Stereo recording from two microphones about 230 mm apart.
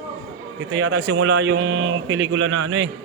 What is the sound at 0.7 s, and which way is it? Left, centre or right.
A man's voice, right.